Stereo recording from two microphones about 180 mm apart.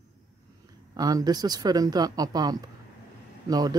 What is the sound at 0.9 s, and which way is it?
Speech, 20° right (ahead or behind).